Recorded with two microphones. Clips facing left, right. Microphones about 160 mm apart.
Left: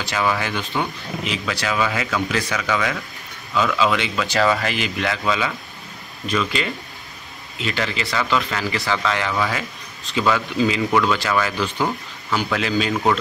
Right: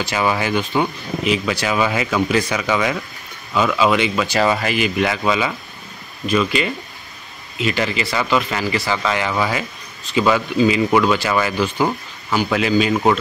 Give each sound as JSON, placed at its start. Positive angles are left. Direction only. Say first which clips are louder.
{"t": 0.1, "sound": "speech", "louder": "right 2 dB", "side_deg": -15}